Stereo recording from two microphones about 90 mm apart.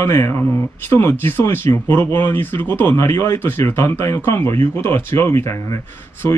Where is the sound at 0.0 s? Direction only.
30° left (ahead or behind).